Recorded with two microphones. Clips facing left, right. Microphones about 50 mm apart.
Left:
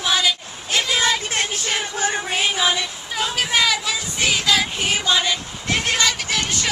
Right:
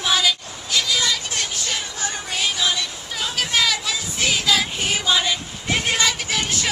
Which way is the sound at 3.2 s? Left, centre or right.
Centre.